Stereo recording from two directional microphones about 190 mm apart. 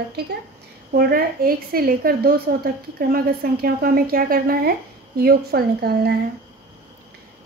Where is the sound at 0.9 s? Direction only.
50° right (ahead or behind).